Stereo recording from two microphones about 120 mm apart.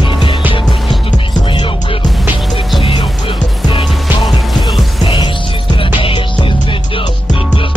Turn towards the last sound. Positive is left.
turn(degrees=45)  # may be behind; listen again after turning